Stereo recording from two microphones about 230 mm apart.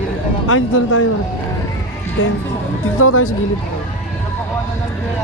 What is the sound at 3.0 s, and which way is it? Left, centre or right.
Speech, left.